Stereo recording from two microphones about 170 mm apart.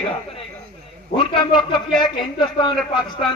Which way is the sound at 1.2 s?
30° left (ahead or behind).